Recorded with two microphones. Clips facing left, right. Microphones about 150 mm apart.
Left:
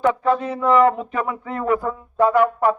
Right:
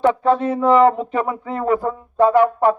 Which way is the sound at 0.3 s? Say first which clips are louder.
Right 3 dB; 25° right (ahead or behind).